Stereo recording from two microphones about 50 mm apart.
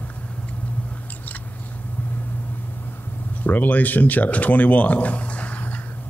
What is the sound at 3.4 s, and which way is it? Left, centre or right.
Speech, left.